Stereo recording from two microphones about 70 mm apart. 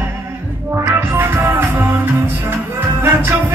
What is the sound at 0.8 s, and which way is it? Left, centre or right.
Music, right.